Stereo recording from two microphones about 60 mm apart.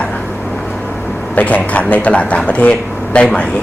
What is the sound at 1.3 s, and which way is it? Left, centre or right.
A man's voice, left.